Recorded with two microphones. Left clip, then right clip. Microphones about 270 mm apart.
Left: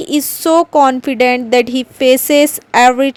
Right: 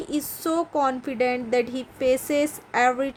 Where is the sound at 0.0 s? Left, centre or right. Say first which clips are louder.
Left 12 dB; left.